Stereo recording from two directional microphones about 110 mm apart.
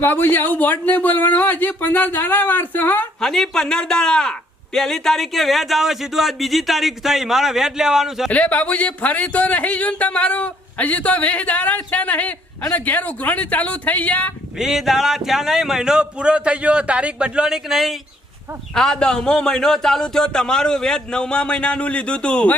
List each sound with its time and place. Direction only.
0.0 s speech: 20° left (ahead or behind)
3.2 s a man's voice: 5° left (ahead or behind)
8.3 s speech: 15° left (ahead or behind)
14.6 s a man's voice: 5° right (ahead or behind)